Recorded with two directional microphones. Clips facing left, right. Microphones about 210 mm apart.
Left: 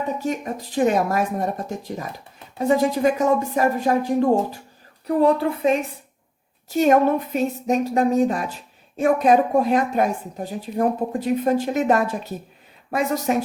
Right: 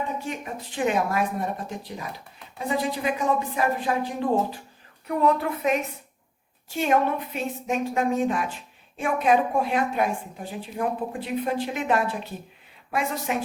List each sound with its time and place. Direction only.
0.2 s a woman's voice: 40° left (ahead or behind)
5.0 s a woman's voice: 30° left (ahead or behind)
6.7 s a woman's voice: 40° left (ahead or behind)